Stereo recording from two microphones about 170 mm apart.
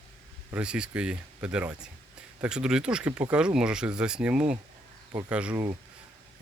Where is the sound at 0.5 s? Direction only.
5° right (ahead or behind).